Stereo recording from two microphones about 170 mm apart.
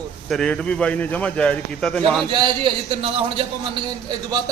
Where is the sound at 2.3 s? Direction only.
25° right (ahead or behind).